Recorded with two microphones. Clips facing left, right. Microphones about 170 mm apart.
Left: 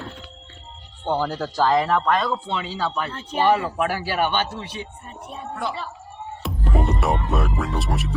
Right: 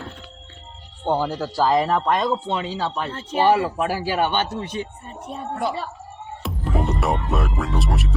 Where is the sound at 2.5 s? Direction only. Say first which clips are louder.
Right 1 dB; 40° right (ahead or behind).